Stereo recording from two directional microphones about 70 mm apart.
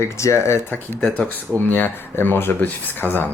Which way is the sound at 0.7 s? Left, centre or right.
Centre.